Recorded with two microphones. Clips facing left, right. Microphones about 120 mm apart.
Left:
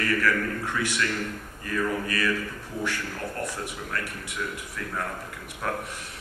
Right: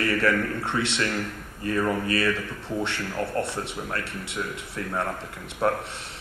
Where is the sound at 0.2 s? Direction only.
25° right (ahead or behind).